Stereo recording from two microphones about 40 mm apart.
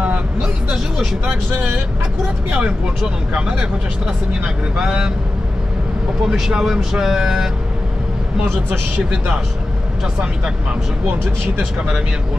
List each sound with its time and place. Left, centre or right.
0.4 s music: centre
3.3 s speech: right
4.8 s speech: centre
6.2 s speech: centre